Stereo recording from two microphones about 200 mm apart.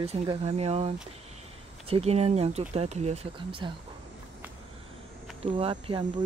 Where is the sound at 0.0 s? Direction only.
30° right (ahead or behind).